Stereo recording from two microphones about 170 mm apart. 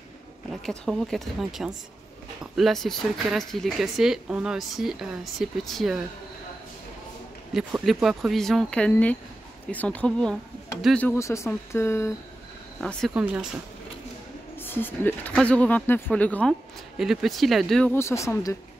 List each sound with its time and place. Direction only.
0.5 s speech: centre (ahead or behind)
7.5 s speech: centre (ahead or behind); by 12.1 s 15° left (ahead or behind)
12.8 s speech: centre (ahead or behind)
13.2 s speech: 10° right (ahead or behind)
14.6 s speech: 10° left (ahead or behind)
17.9 s speech: 15° left (ahead or behind)